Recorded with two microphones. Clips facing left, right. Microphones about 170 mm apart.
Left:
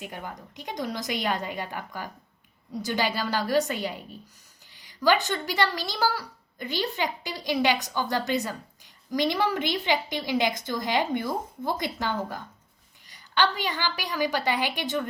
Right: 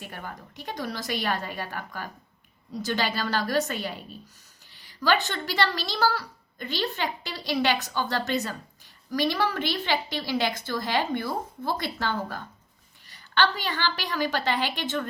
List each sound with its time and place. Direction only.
0.0 s speech: 15° left (ahead or behind)